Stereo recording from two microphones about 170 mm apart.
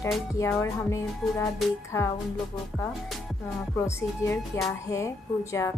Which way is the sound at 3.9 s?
15° left (ahead or behind).